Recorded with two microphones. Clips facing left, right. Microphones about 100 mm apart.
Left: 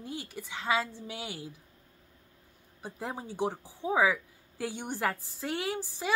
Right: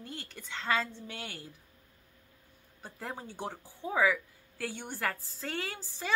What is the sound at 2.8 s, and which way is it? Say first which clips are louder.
A woman's voice: left 3 dB; 15° left (ahead or behind).